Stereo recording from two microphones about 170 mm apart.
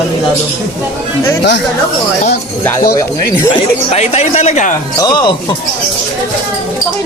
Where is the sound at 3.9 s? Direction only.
40° left (ahead or behind).